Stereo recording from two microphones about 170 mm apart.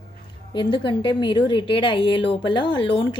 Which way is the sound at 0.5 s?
25° left (ahead or behind).